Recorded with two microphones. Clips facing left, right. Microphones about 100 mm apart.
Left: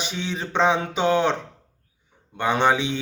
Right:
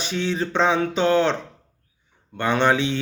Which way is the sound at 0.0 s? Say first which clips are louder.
Right 5 dB; 15° left (ahead or behind).